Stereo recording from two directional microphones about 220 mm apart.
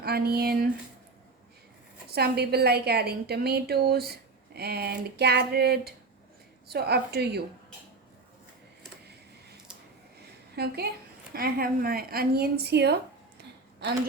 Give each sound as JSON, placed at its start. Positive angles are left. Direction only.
{"t": 0.0, "sound": "a woman's voice", "side_deg": -45}
{"t": 2.1, "sound": "a woman's voice", "side_deg": -45}
{"t": 10.5, "sound": "a woman's voice", "side_deg": -45}